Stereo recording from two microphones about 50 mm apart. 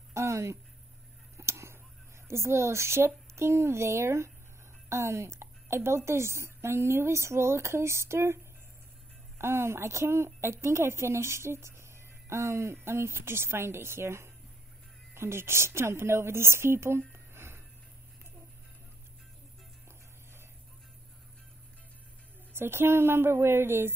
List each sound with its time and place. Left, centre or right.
0.1 s speech: right
1.3 s a sound: right
2.2 s a woman's voice: right
9.4 s a woman's voice: right
12.8 s a woman's voice: right
17.1 s a sound: right
22.5 s a woman's voice: right